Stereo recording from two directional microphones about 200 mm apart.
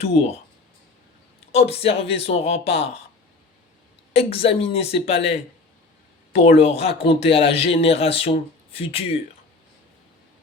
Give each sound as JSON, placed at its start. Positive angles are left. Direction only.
{"t": 0.0, "sound": "speech", "side_deg": 30}
{"t": 1.5, "sound": "speech", "side_deg": 30}
{"t": 4.1, "sound": "speech", "side_deg": 30}
{"t": 6.4, "sound": "speech", "side_deg": 30}